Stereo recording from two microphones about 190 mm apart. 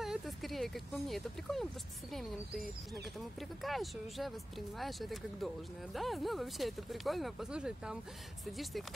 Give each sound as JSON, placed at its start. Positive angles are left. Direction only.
{"t": 0.0, "sound": "speech", "side_deg": 0}